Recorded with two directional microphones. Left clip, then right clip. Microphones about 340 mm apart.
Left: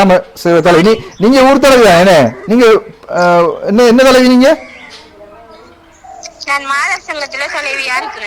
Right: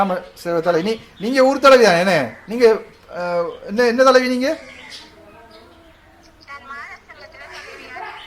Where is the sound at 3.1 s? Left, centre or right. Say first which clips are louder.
Left 13 dB; left.